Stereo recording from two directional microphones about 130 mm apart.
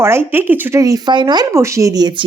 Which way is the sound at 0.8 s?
30° right (ahead or behind).